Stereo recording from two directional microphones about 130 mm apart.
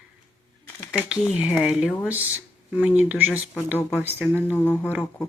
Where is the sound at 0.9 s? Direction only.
10° right (ahead or behind).